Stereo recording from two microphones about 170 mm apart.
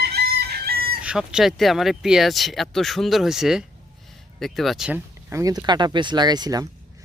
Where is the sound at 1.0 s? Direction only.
5° right (ahead or behind); by 6.7 s 25° right (ahead or behind).